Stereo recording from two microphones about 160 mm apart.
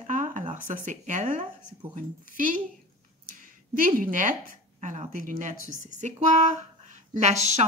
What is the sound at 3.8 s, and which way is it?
A woman's voice, 60° right (ahead or behind).